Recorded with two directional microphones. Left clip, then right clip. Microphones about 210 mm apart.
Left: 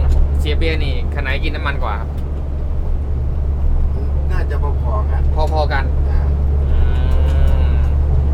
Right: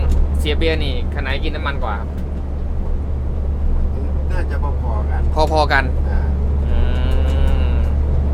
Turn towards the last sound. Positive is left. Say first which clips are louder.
# even
turn(degrees=-15)  # may be behind; listen again after turning